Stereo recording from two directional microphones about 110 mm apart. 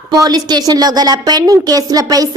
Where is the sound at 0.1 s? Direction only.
35° right (ahead or behind).